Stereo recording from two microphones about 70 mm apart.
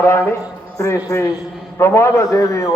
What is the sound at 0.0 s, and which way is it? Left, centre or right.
Speech, left.